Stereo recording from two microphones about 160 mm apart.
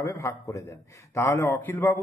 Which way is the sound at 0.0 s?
20° left (ahead or behind).